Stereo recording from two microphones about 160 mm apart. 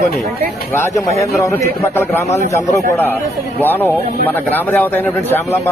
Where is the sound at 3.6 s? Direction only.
15° left (ahead or behind).